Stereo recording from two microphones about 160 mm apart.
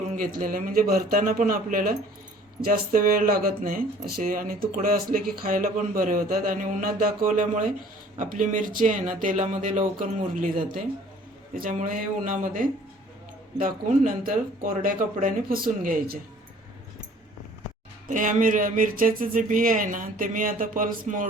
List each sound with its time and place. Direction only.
0.1 s speech: 60° right (ahead or behind)
18.1 s speech: 55° right (ahead or behind)